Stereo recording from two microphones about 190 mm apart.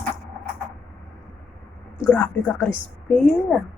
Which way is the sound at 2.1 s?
10° left (ahead or behind).